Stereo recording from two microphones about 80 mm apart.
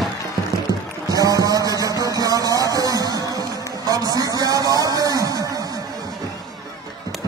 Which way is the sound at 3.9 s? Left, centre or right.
Right.